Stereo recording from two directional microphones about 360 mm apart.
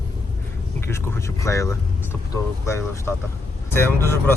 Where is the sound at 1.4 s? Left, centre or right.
Centre.